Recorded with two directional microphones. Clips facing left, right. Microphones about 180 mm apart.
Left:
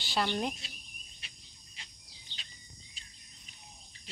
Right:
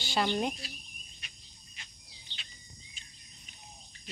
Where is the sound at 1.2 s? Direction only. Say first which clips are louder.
Even; 30° left (ahead or behind).